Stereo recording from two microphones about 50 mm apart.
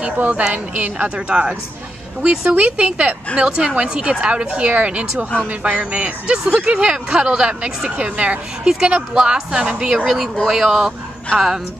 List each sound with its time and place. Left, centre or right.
0.0 s a woman's voice: right
10.0 s speech: centre